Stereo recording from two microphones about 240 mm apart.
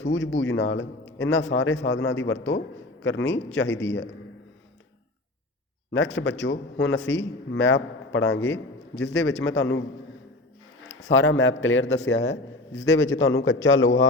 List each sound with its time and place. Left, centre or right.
0.0 s a man's voice: left
6.1 s a man's voice: left
11.1 s a man's voice: left